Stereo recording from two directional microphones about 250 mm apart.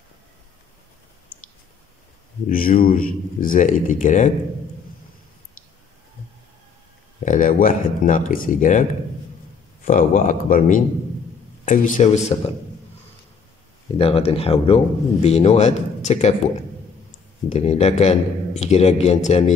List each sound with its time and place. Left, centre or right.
2.4 s speech: left
7.2 s speech: left
9.8 s speech: left
13.9 s a man's voice: left
17.5 s a man's voice: left